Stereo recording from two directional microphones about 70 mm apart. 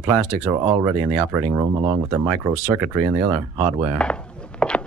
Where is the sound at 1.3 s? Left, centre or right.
Right.